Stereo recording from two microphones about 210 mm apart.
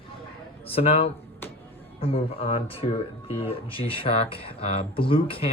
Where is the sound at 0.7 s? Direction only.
25° left (ahead or behind).